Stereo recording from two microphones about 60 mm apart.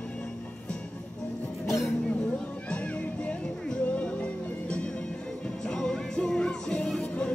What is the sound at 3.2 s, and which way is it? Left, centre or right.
Music, centre.